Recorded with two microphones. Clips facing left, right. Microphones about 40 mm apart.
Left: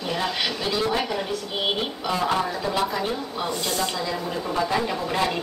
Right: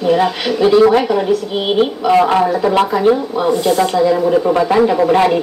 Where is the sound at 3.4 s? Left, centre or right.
Right.